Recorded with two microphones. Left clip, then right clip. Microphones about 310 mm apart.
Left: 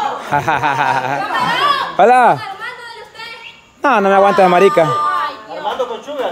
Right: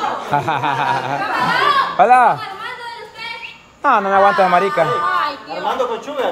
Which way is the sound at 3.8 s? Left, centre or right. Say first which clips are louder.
Left 2 dB; left.